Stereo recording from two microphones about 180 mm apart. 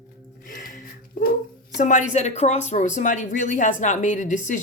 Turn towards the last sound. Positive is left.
turn(degrees=45)  # may be behind; listen again after turning